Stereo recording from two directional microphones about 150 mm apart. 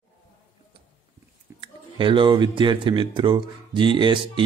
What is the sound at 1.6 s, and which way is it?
Speech, 35° right (ahead or behind).